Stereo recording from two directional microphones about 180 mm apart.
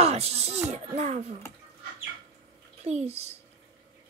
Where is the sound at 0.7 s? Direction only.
40° right (ahead or behind).